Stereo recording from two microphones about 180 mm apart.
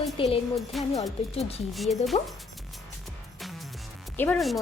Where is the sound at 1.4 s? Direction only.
35° left (ahead or behind).